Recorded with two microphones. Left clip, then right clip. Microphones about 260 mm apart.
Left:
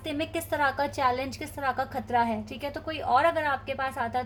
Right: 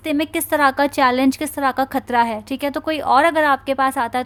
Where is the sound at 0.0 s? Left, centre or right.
Right.